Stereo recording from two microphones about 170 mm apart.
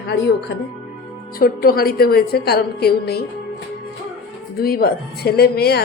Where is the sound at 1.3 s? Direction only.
60° left (ahead or behind).